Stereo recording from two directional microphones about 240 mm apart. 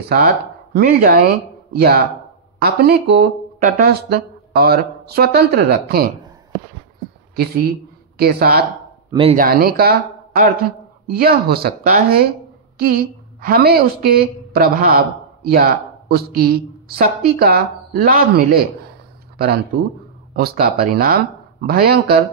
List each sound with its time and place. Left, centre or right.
0.7 s speech: right
7.3 s speech: right
9.1 s speech: right
9.4 s a woman's voice: right